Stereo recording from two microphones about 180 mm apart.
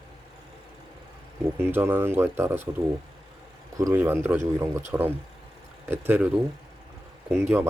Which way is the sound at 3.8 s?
10° right (ahead or behind).